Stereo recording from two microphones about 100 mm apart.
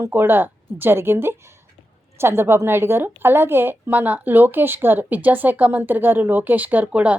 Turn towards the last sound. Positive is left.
turn(degrees=-15)  # may be behind; listen again after turning